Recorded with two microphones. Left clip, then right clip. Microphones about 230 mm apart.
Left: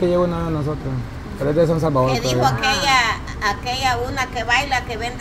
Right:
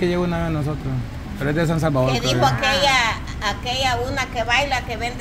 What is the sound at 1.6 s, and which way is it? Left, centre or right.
Speech, right.